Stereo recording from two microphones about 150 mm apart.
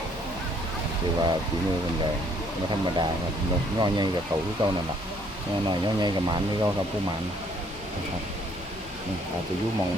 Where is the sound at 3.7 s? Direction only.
25° right (ahead or behind).